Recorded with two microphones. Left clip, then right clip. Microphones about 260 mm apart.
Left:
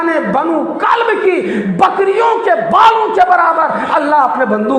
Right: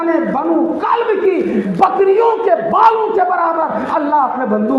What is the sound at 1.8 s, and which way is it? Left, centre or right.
A man's voice, left.